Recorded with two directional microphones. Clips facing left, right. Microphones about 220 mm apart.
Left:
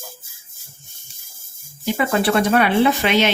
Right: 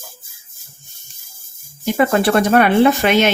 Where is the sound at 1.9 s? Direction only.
50° right (ahead or behind).